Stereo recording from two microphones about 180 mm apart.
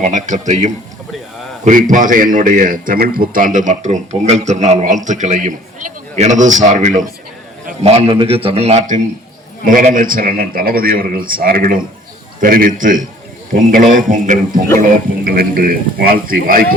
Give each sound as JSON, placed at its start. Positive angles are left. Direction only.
{"t": 0.0, "sound": "a man's voice", "side_deg": -45}
{"t": 9.6, "sound": "a man's voice", "side_deg": -50}